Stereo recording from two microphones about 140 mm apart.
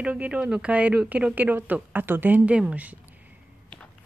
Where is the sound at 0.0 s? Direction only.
10° right (ahead or behind).